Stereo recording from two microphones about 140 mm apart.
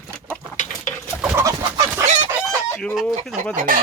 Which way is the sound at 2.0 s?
60° right (ahead or behind).